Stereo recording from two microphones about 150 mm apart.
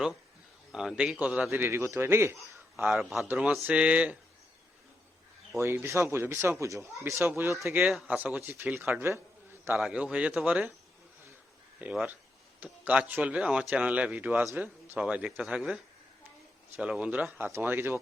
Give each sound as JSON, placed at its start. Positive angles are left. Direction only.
{"t": 0.7, "sound": "speech", "side_deg": -5}
{"t": 2.8, "sound": "a man's voice", "side_deg": 0}
{"t": 5.5, "sound": "speech", "side_deg": -15}
{"t": 7.8, "sound": "speech", "side_deg": -5}
{"t": 11.8, "sound": "a man's voice", "side_deg": -10}